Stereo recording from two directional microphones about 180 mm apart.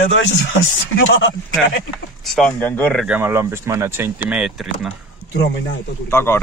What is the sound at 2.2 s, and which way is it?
Speech, 5° left (ahead or behind).